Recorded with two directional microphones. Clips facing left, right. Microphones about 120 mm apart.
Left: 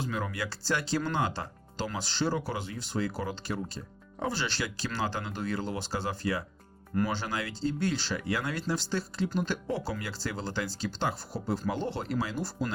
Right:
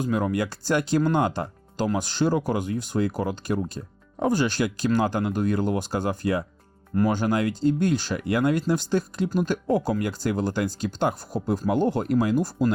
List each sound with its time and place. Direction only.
0.0 s speech: 45° right (ahead or behind)